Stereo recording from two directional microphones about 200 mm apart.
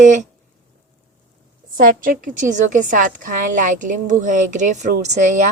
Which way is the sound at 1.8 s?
45° right (ahead or behind).